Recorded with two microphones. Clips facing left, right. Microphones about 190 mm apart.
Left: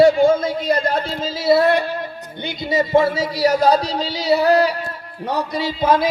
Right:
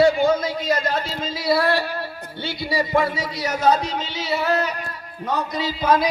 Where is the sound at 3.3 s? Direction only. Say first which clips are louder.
Left 4 dB; 35° left (ahead or behind).